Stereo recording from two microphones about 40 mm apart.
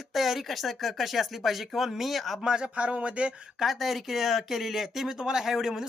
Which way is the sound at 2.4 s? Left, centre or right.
Centre.